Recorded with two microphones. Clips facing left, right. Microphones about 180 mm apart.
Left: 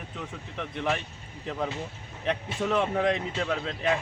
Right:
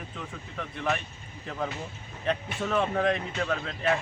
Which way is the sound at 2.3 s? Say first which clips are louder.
Left 1 dB; 15° left (ahead or behind).